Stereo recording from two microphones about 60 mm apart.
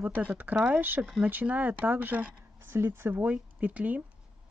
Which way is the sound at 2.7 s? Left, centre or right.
Right.